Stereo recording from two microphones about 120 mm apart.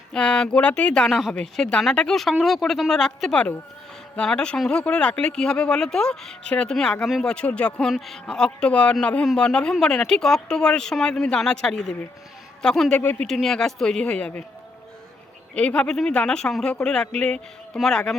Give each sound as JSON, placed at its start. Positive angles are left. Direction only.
{"t": 0.1, "sound": "speech", "side_deg": 5}
{"t": 13.2, "sound": "speech", "side_deg": 5}
{"t": 15.5, "sound": "speech", "side_deg": 10}